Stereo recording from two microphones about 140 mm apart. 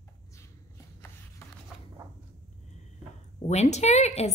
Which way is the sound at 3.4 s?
50° left (ahead or behind).